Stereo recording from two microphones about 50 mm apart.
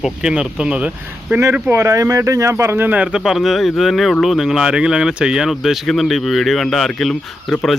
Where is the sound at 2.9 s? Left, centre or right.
Right.